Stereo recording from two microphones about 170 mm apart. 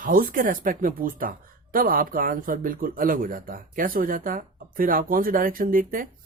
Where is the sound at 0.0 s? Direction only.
55° right (ahead or behind).